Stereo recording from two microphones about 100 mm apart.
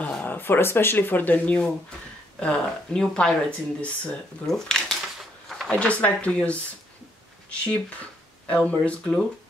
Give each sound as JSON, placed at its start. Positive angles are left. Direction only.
{"t": 0.0, "sound": "speech", "side_deg": 15}
{"t": 8.6, "sound": "speech", "side_deg": 15}